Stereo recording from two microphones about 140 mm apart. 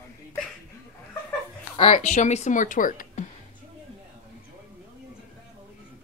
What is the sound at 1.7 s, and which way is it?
Speech, 45° left (ahead or behind).